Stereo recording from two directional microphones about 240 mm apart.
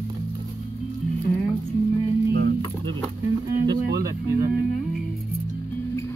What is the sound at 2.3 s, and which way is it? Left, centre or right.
Guitar, right.